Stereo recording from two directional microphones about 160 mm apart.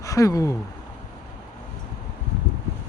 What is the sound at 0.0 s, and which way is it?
Speech, 20° left (ahead or behind).